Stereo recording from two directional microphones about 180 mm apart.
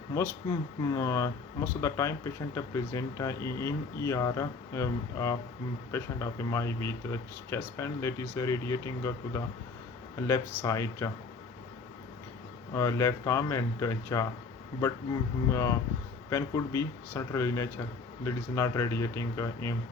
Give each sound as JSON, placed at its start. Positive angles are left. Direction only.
{"t": 0.1, "sound": "speech", "side_deg": 15}
{"t": 12.7, "sound": "speech", "side_deg": 15}
{"t": 15.4, "sound": "speech", "side_deg": 15}